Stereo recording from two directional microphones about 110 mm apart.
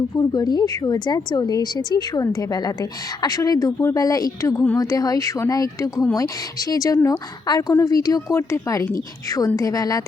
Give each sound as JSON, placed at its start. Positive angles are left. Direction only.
{"t": 0.2, "sound": "speech", "side_deg": 40}
{"t": 9.6, "sound": "speech", "side_deg": 35}